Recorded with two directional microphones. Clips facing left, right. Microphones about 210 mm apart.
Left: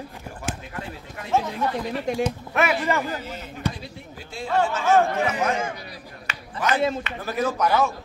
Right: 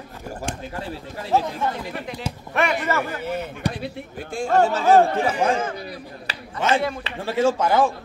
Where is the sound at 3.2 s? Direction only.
60° right (ahead or behind).